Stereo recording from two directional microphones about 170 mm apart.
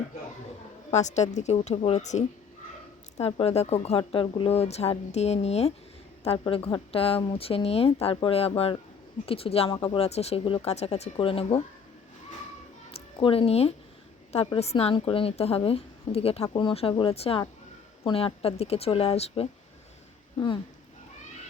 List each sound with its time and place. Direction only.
0.9 s a woman's voice: 40° left (ahead or behind)
13.1 s a woman's voice: 30° left (ahead or behind)